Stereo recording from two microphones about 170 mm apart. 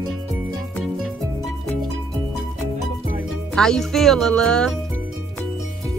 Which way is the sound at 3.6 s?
5° left (ahead or behind).